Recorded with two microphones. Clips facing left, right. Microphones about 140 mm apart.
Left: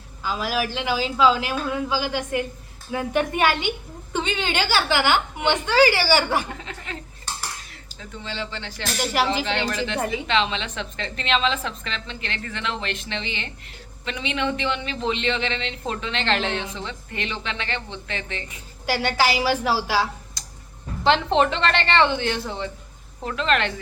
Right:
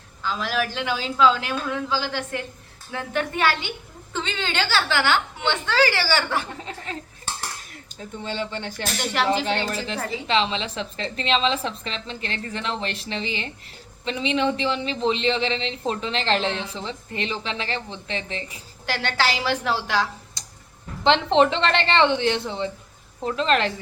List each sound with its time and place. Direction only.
0.2 s a woman's voice: 10° left (ahead or behind)
6.6 s a woman's voice: 35° right (ahead or behind)
7.9 s speech: 45° right (ahead or behind)
9.0 s a woman's voice: 10° left (ahead or behind)
9.4 s a woman's voice: 40° right (ahead or behind)
18.9 s a woman's voice: 10° left (ahead or behind)
20.4 s tick-tock: 25° right (ahead or behind)
21.3 s a woman's voice: 25° right (ahead or behind)